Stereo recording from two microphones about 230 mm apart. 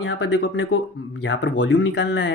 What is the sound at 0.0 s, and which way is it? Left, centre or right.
Speech, left.